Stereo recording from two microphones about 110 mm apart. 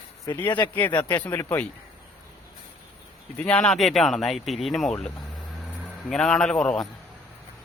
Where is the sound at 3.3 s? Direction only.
10° left (ahead or behind).